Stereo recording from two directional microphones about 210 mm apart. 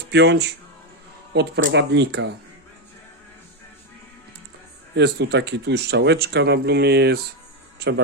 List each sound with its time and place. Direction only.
0.1 s speech: 50° right (ahead or behind)
4.9 s speech: 55° right (ahead or behind)